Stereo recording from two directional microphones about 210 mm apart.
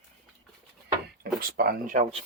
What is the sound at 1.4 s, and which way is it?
Speech, 45° right (ahead or behind).